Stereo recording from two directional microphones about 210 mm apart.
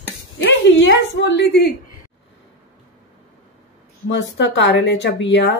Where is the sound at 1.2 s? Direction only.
55° left (ahead or behind).